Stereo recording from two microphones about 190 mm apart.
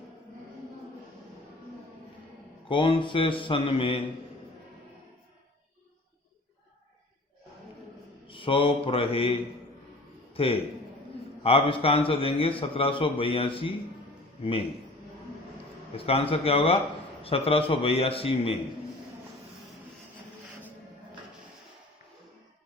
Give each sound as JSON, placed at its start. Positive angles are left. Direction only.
{"t": 2.6, "sound": "a man's voice", "side_deg": 25}
{"t": 8.3, "sound": "a man's voice", "side_deg": 25}
{"t": 16.0, "sound": "a man's voice", "side_deg": 30}